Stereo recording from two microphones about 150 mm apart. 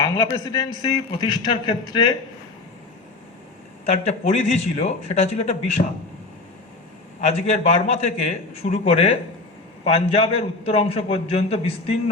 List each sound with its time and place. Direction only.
0.0 s a man's voice: 25° left (ahead or behind)
3.8 s a man's voice: 45° left (ahead or behind)
7.2 s a man's voice: 45° left (ahead or behind)